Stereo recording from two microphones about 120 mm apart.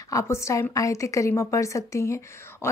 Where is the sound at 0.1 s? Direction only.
25° left (ahead or behind).